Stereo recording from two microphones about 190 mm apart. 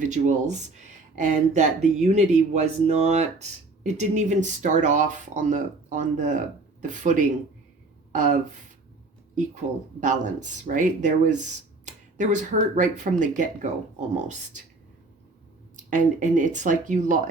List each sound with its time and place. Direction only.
0.0 s speech: 40° right (ahead or behind)
10.0 s speech: 40° right (ahead or behind)
15.7 s speech: 40° right (ahead or behind)